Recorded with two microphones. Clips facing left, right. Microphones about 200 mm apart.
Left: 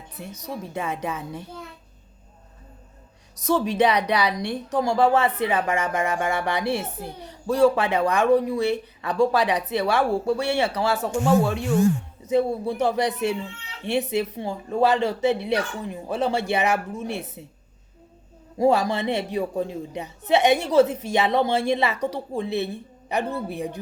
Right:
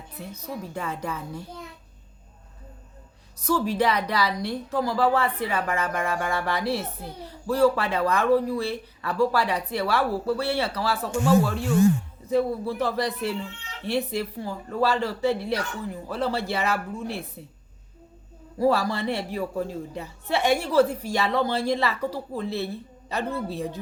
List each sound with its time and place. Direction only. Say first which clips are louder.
0.4 s a child's voice: left 3 dB; 20° left (ahead or behind)
3.4 s a child's voice: left 3 dB; 20° left (ahead or behind)
17.2 s speech: left 2 dB; 80° left
18.5 s a child's voice: left 3 dB; 15° left (ahead or behind)